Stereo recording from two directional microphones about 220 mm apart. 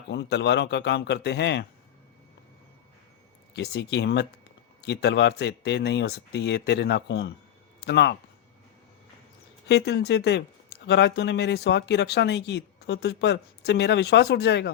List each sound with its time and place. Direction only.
0.1 s speech: 50° left (ahead or behind)
3.5 s speech: 50° left (ahead or behind)
9.6 s speech: 50° left (ahead or behind)